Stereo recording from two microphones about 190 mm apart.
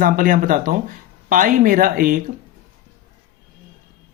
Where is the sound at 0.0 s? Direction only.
45° right (ahead or behind).